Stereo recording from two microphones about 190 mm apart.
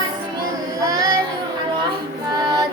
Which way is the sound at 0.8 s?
20° right (ahead or behind).